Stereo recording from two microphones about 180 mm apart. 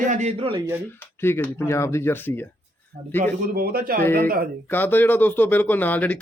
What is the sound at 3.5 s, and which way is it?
Speech, 55° right (ahead or behind).